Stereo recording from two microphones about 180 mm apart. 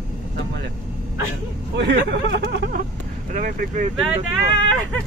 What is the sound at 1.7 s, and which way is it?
Speech, 70° right (ahead or behind).